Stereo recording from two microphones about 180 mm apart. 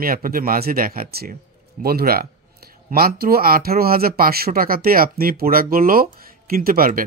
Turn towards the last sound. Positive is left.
turn(degrees=-55)  # may be behind; listen again after turning